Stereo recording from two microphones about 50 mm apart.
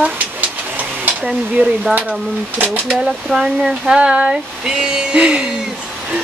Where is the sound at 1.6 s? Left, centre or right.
Right.